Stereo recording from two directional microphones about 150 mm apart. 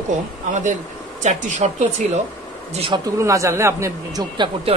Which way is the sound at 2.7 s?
35° right (ahead or behind).